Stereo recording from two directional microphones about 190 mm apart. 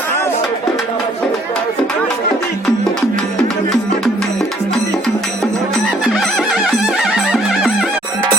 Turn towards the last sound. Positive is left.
turn(degrees=0)  # may be behind; listen again after turning